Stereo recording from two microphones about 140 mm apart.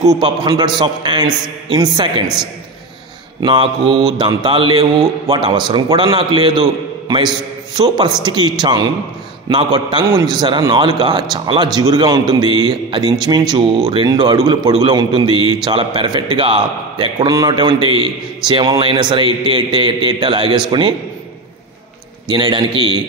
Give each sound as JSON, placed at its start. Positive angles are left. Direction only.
{"t": 0.0, "sound": "a man's voice", "side_deg": -30}
{"t": 3.4, "sound": "a man's voice", "side_deg": -35}
{"t": 22.3, "sound": "a man's voice", "side_deg": -35}